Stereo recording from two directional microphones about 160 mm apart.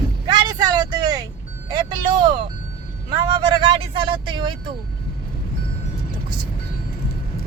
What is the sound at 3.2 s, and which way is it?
Vehicle, 30° right (ahead or behind).